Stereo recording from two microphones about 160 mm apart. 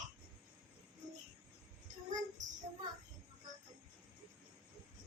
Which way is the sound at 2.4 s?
50° right (ahead or behind).